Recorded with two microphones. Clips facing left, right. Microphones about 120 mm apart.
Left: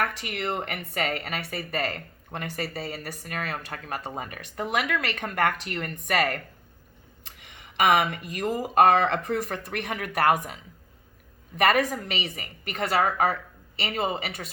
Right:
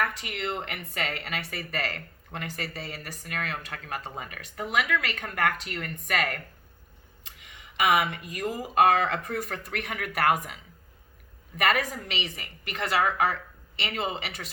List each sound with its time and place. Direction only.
0.0 s speech: 55° left (ahead or behind); by 6.4 s 35° left (ahead or behind)
7.8 s speech: 40° left (ahead or behind)
9.2 s speech: 35° left (ahead or behind)
11.6 s speech: 40° left (ahead or behind)